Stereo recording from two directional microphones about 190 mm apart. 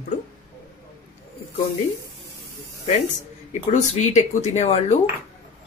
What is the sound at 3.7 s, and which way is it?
A man's voice, 40° left (ahead or behind).